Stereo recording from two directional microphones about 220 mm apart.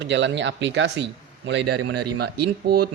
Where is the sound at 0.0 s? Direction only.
55° right (ahead or behind).